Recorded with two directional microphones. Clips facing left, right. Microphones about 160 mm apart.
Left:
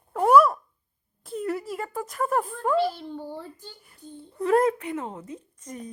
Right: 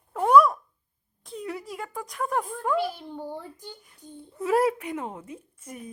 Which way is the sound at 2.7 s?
15° right (ahead or behind).